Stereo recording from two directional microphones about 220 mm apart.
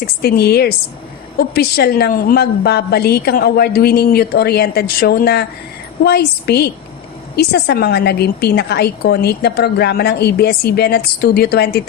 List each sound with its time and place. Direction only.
0.2 s a woman's voice: 45° left (ahead or behind)